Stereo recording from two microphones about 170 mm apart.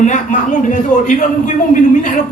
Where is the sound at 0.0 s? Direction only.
45° left (ahead or behind).